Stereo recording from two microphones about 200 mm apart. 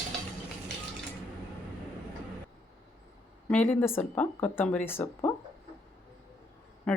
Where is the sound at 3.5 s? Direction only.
10° left (ahead or behind).